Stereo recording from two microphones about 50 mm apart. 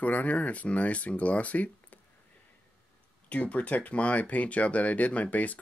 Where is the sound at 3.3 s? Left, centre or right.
Left.